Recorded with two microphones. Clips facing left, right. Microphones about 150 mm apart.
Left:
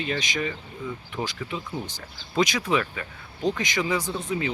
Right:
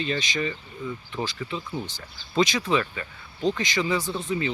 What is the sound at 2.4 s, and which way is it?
Speech, 5° left (ahead or behind).